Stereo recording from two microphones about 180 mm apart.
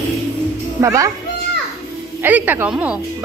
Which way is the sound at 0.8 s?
15° right (ahead or behind).